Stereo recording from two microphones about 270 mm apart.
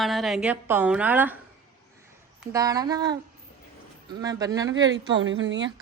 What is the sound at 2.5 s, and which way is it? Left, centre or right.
Speech, centre.